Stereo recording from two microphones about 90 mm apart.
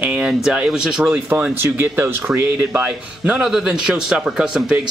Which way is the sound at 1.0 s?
20° right (ahead or behind).